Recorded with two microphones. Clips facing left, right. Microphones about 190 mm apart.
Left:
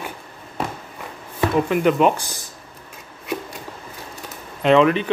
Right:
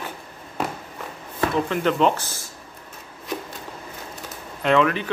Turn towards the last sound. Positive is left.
turn(degrees=20)  # may be behind; listen again after turning